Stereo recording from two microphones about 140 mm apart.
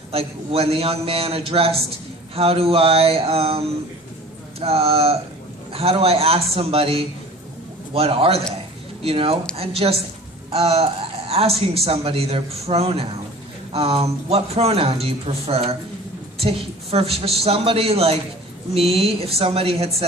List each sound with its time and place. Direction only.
0.1 s a woman's voice: 45° right (ahead or behind)